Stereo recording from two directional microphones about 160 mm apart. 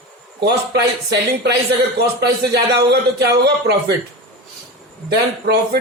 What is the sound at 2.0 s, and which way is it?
Speech, 90° right.